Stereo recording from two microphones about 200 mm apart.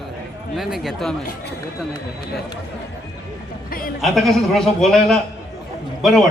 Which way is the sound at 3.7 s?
45° left (ahead or behind).